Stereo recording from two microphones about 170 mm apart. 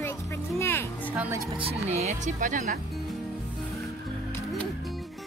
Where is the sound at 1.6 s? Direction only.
35° right (ahead or behind).